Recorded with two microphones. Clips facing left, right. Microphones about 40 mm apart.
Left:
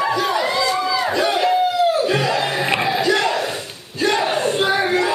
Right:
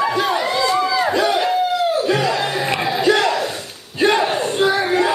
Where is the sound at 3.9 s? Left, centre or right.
Centre.